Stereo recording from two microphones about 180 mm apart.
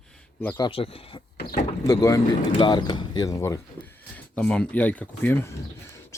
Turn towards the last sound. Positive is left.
turn(degrees=10)  # may be behind; listen again after turning